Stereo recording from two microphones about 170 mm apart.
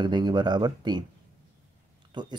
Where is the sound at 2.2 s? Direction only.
25° right (ahead or behind).